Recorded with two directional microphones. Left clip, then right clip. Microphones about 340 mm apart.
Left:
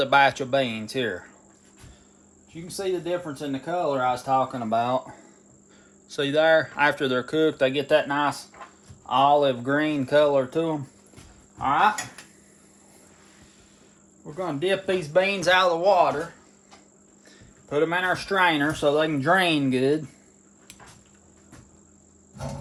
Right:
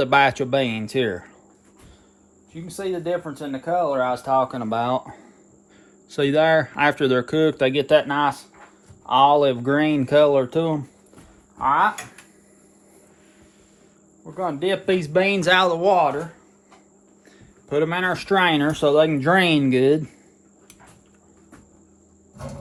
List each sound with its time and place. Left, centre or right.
0.0 s speech: right
2.7 s speech: centre
4.3 s speech: centre
14.3 s speech: centre; by 16.1 s right
17.2 s speech: right